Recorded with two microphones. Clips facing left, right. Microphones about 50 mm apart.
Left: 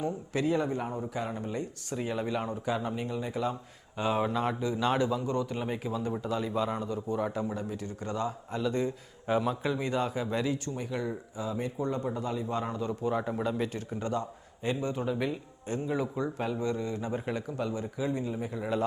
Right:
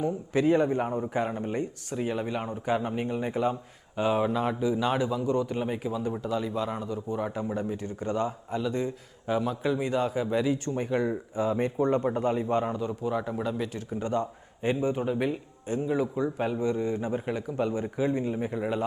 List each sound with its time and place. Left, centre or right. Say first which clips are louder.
0.4 s speech: right 5 dB; right
1.9 s speech: right 1 dB; centre
2.6 s speech: right 4 dB; right
3.9 s a man's voice: right 3 dB; centre
7.3 s speech: right 3 dB; centre
8.3 s a man's voice: right 1 dB; centre
10.8 s a man's voice: right 6 dB; right
12.6 s speech: right 2 dB; centre
13.1 s a man's voice: right 1 dB; centre
14.0 s speech: right 4 dB; right
15.6 s a man's voice: right 4 dB; centre
16.5 s speech: right 4 dB; centre
17.1 s speech: right 3 dB; centre
17.6 s speech: right 5 dB; right